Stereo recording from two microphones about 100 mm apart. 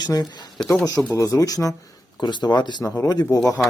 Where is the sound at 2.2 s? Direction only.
45° left (ahead or behind).